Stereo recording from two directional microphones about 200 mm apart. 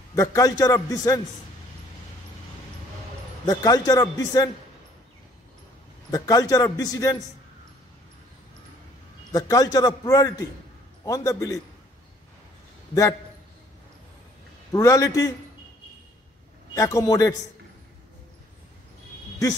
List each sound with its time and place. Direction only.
0.1 s a man's voice: 15° left (ahead or behind)
3.4 s a man's voice: 20° left (ahead or behind)
6.1 s a man's voice: 20° left (ahead or behind)
9.3 s a man's voice: 15° left (ahead or behind)
14.7 s a man's voice: 15° left (ahead or behind)
16.7 s a man's voice: 15° left (ahead or behind)